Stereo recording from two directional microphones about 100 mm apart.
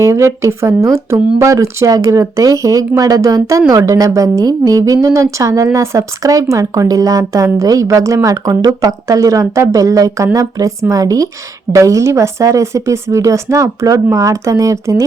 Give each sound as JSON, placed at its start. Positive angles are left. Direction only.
{"t": 0.0, "sound": "speech", "side_deg": -30}